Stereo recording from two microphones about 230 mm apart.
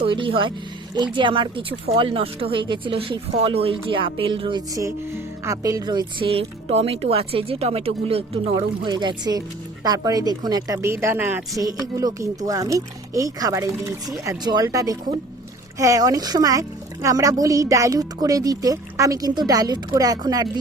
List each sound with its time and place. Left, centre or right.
0.0 s speech: right